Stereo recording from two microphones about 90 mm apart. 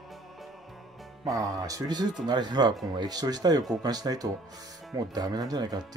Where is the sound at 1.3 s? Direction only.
40° right (ahead or behind).